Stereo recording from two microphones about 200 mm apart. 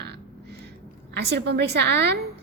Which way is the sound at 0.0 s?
55° right (ahead or behind).